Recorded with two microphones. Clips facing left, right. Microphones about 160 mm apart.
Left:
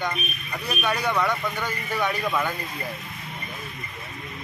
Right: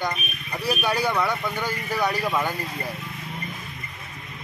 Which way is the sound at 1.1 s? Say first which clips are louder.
Even; 5° right (ahead or behind).